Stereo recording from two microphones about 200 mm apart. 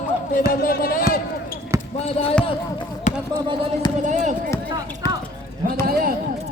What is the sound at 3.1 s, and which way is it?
Basketball bounce, 35° left (ahead or behind).